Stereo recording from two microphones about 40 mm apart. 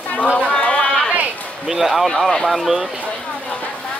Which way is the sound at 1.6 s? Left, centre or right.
Centre.